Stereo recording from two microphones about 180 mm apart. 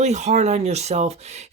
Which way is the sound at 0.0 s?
40° right (ahead or behind).